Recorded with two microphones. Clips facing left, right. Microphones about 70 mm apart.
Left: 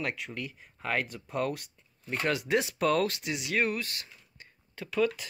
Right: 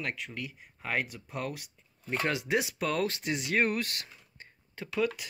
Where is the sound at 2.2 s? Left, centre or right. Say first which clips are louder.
Left 2 dB; centre.